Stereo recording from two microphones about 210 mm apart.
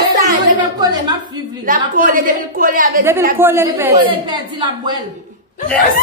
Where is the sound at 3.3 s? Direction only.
10° right (ahead or behind).